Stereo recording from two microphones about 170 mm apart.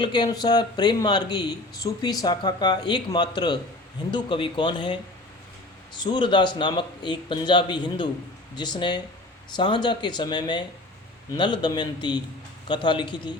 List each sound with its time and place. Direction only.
0.0 s speech: 25° left (ahead or behind)
6.0 s speech: 25° left (ahead or behind)